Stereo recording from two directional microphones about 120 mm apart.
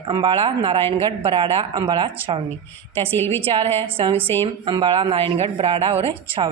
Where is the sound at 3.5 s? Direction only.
55° right (ahead or behind).